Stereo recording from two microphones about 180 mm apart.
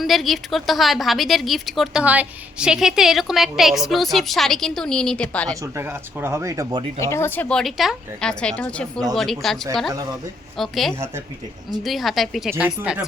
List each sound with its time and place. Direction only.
0.0 s a woman's voice: centre (ahead or behind)
5.6 s speech: 15° right (ahead or behind)
7.0 s a woman's voice: 15° left (ahead or behind)
10.6 s a woman's voice: centre (ahead or behind)